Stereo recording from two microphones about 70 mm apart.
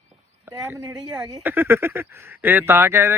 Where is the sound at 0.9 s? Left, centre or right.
Centre.